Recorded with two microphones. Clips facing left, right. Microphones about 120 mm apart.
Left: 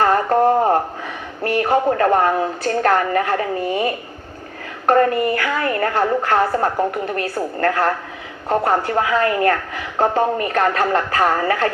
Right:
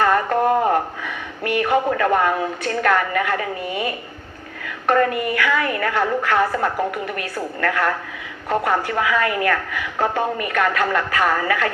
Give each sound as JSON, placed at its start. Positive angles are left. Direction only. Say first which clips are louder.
{"t": 0.0, "sound": "a woman's voice", "louder": "left 3 dB", "side_deg": 35}